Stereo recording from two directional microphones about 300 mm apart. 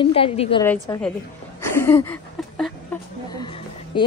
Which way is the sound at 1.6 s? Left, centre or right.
Centre.